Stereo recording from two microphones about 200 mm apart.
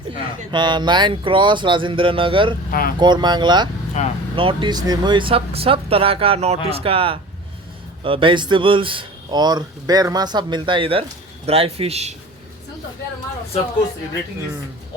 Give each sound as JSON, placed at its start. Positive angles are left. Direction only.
{"t": 0.5, "sound": "speech", "side_deg": -20}
{"t": 2.6, "sound": "speech", "side_deg": 45}
{"t": 3.0, "sound": "speech", "side_deg": -20}
{"t": 4.0, "sound": "speech", "side_deg": 35}
{"t": 4.4, "sound": "a man's voice", "side_deg": -25}